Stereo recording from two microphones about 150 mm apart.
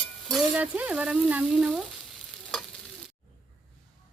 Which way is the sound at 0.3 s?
5° right (ahead or behind).